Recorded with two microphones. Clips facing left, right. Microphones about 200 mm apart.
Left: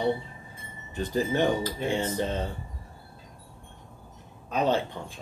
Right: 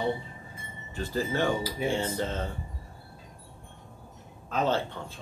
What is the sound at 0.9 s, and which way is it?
Speech, 20° left (ahead or behind).